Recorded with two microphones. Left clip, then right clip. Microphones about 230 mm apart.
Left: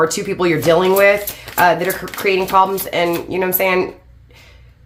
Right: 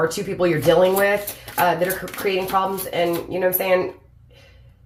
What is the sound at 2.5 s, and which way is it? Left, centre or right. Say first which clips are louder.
Speech: left 7 dB; left.